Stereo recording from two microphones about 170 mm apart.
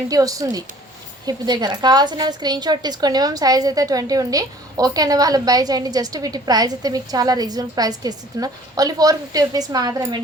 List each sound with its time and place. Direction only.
0.1 s a woman's voice: 20° right (ahead or behind)